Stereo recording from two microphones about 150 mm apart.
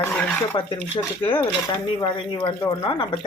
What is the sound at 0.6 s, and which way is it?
Speech, 30° left (ahead or behind).